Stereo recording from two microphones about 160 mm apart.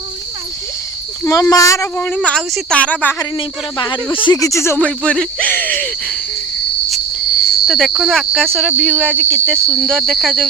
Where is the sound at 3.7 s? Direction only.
30° left (ahead or behind); by 5.9 s 10° left (ahead or behind).